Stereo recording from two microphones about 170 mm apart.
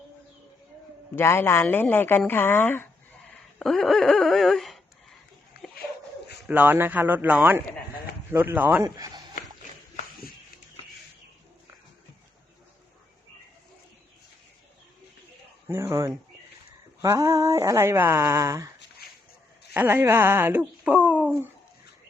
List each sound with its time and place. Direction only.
1.1 s a woman's voice: 15° left (ahead or behind)
3.6 s a sound: centre (ahead or behind)
6.5 s speech: 10° right (ahead or behind)
15.6 s speech: 15° right (ahead or behind)
19.7 s speech: 15° right (ahead or behind)